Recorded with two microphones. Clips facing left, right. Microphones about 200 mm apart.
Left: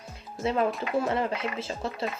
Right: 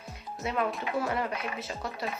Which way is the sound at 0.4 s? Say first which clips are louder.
Left 4 dB; 30° left (ahead or behind).